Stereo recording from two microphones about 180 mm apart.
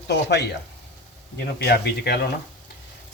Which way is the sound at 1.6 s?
65° left (ahead or behind).